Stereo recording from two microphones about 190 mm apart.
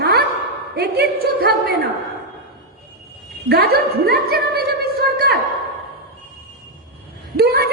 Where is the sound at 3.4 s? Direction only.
55° right (ahead or behind).